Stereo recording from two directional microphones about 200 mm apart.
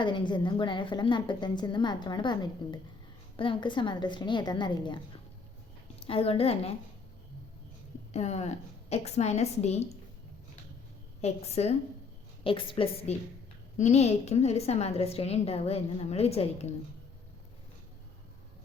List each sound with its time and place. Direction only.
0.0 s a woman's voice: 25° left (ahead or behind)
6.0 s a woman's voice: 30° left (ahead or behind)
8.1 s a woman's voice: 35° left (ahead or behind)
11.2 s a woman's voice: 30° left (ahead or behind)